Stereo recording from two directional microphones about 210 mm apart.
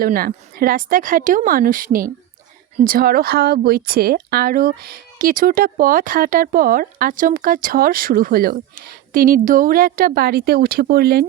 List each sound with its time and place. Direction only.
0.0 s speech: 45° right (ahead or behind)